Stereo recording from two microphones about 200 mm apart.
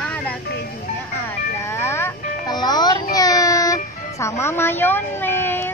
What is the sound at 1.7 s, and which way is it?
Music, 15° left (ahead or behind).